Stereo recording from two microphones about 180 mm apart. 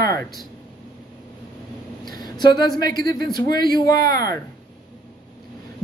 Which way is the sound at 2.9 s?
25° left (ahead or behind).